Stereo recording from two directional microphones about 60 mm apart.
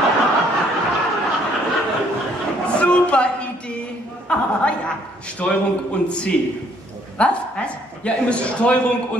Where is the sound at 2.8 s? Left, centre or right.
Left.